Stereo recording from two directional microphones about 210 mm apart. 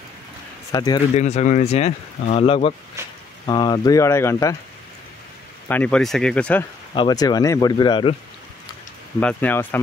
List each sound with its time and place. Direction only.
0.7 s speech: 20° left (ahead or behind)
1.1 s speech: 35° left (ahead or behind); by 4.6 s 15° left (ahead or behind)
5.7 s speech: 5° left (ahead or behind)
6.9 s speech: 20° left (ahead or behind)
9.2 s speech: 5° left (ahead or behind)